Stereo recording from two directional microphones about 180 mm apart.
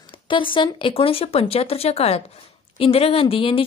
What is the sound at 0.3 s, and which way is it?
A woman's voice, 30° left (ahead or behind).